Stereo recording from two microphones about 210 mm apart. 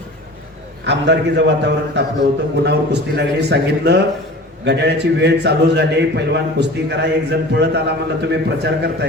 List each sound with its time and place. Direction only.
0.9 s a man's voice: 55° right (ahead or behind)